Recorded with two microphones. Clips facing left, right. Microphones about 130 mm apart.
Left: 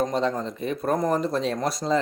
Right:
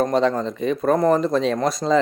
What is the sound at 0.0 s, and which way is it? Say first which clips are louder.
Speech: right 5 dB; 75° right (ahead or behind).